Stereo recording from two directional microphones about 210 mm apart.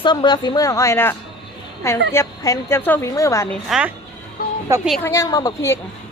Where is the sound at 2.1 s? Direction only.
15° left (ahead or behind).